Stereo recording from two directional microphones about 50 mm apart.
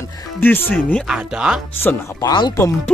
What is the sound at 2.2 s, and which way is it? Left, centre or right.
Speech, left.